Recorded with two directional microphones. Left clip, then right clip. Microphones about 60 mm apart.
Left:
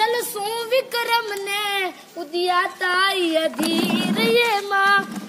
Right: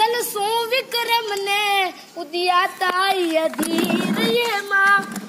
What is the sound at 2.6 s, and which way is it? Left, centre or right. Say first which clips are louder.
Speech: even; left.